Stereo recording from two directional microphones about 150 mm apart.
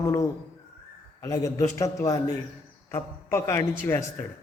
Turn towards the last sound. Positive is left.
turn(degrees=15)  # may be behind; listen again after turning